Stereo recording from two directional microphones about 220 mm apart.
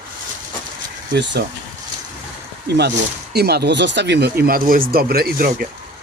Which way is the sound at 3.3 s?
45° right (ahead or behind).